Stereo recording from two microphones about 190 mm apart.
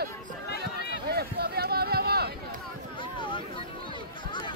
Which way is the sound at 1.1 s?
55° right (ahead or behind).